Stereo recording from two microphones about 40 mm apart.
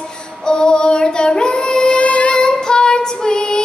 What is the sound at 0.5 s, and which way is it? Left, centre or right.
Child singing, left.